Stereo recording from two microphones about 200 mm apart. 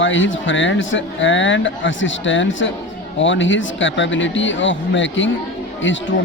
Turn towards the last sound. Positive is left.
turn(degrees=70)  # may be behind; listen again after turning